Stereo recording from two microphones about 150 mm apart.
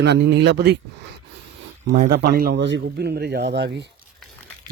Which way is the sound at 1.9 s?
80° right.